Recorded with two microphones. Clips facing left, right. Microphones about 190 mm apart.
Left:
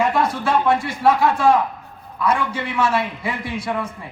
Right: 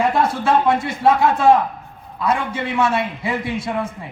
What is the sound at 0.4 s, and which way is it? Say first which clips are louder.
A man's voice: right 2 dB; 25° right (ahead or behind).